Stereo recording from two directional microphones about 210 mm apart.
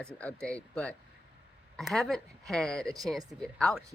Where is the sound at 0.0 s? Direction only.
5° left (ahead or behind).